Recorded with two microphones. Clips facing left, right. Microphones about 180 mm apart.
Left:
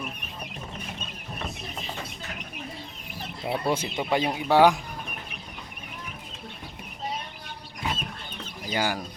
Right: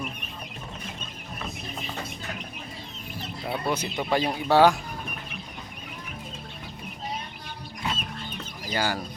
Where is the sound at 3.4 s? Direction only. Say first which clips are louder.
Left 2 dB; 25° left (ahead or behind).